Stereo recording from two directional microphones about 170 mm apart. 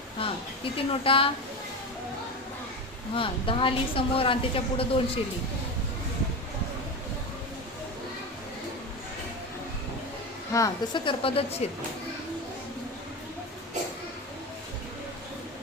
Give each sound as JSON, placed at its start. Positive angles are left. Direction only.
{"t": 0.2, "sound": "a woman's voice", "side_deg": 30}
{"t": 3.2, "sound": "a woman's voice", "side_deg": 30}
{"t": 10.5, "sound": "a woman's voice", "side_deg": 25}